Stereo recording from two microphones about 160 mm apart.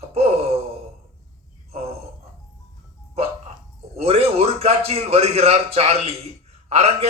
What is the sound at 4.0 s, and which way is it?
A man's voice, 40° right (ahead or behind).